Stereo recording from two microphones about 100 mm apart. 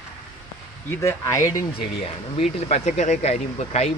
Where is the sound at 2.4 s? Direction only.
90° left.